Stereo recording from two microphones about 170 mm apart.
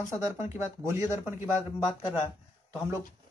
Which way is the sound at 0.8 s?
15° right (ahead or behind).